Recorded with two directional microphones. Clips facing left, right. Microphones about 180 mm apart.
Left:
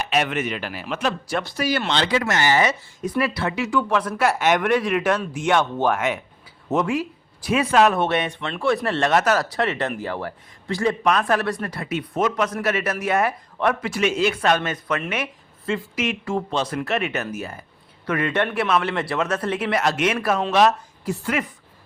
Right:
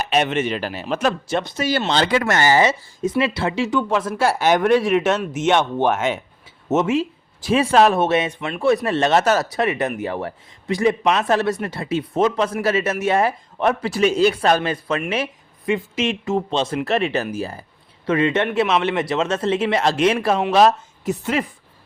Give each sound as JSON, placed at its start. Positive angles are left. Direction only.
{"t": 0.0, "sound": "speech", "side_deg": -25}
{"t": 1.9, "sound": "speech", "side_deg": -50}
{"t": 2.5, "sound": "speech", "side_deg": -30}
{"t": 8.4, "sound": "speech", "side_deg": -10}
{"t": 21.0, "sound": "speech", "side_deg": -20}